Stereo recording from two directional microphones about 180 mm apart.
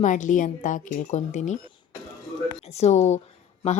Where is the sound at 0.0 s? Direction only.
45° left (ahead or behind).